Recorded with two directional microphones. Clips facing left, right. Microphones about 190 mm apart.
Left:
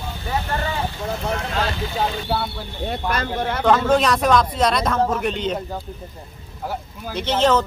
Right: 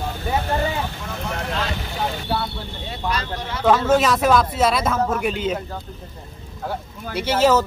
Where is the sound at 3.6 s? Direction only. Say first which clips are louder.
Right 1 dB; 5° right (ahead or behind).